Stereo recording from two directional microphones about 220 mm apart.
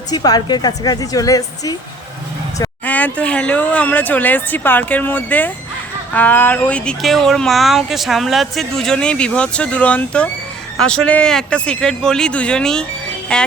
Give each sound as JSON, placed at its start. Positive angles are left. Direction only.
{"t": 0.1, "sound": "speech", "side_deg": 20}